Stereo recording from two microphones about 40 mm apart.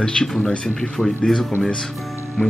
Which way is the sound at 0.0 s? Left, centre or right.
Left.